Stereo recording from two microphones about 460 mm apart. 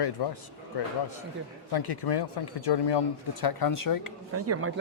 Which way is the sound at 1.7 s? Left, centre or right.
Left.